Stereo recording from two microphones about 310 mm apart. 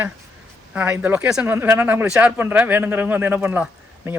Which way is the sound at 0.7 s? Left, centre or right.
Centre.